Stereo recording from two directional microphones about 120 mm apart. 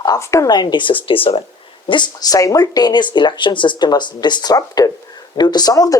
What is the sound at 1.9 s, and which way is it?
Speech, 35° left (ahead or behind).